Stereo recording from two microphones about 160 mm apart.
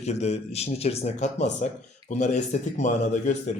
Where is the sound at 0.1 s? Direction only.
45° left (ahead or behind).